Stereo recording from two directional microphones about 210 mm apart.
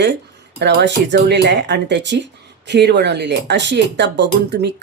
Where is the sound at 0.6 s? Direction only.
55° right (ahead or behind).